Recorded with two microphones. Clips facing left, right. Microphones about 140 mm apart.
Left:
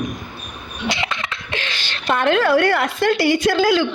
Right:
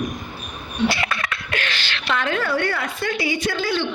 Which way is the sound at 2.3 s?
90° left.